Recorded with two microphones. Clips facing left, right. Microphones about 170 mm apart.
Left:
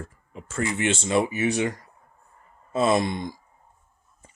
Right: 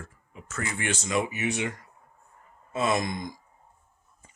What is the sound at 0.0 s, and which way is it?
Speech, 30° left (ahead or behind).